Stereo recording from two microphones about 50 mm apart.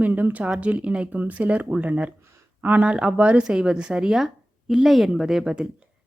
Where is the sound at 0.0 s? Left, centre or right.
Right.